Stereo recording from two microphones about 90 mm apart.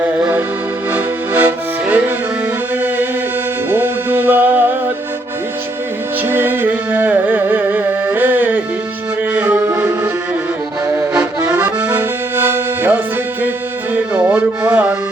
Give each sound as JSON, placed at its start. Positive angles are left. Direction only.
{"t": 0.9, "sound": "accordion", "side_deg": -20}
{"t": 3.7, "sound": "music", "side_deg": -20}
{"t": 6.2, "sound": "music", "side_deg": -25}
{"t": 11.5, "sound": "accordion", "side_deg": -20}
{"t": 13.9, "sound": "music", "side_deg": -15}